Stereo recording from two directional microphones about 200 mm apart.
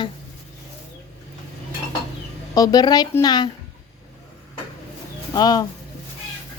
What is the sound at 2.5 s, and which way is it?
Speech, 20° left (ahead or behind).